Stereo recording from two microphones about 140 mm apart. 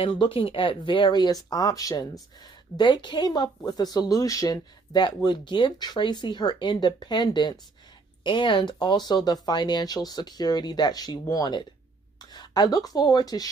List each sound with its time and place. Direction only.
0.0 s speech: 40° left (ahead or behind)